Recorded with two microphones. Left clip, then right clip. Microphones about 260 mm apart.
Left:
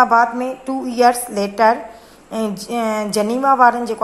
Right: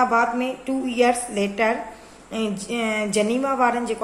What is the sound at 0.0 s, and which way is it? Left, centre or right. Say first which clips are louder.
A woman's voice: left 6 dB; centre.